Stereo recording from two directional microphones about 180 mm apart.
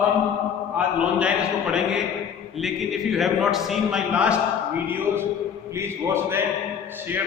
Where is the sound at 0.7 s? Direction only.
5° right (ahead or behind).